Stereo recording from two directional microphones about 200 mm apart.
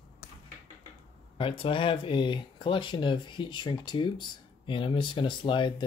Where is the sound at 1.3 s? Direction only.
25° left (ahead or behind).